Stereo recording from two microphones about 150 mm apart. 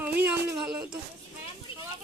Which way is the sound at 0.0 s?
10° right (ahead or behind).